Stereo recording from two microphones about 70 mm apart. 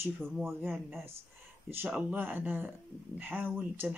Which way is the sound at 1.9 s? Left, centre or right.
Right.